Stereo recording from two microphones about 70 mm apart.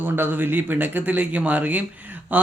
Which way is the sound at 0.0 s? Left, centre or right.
Right.